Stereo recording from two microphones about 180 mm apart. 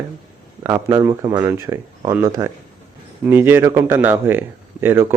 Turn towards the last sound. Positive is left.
turn(degrees=-10)  # may be behind; listen again after turning